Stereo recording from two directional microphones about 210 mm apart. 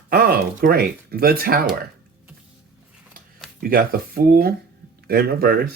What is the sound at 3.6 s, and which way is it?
Speech, 45° right (ahead or behind).